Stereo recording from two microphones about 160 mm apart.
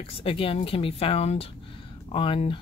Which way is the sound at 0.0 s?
35° left (ahead or behind).